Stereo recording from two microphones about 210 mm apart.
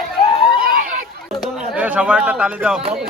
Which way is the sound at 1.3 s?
Centre (ahead or behind).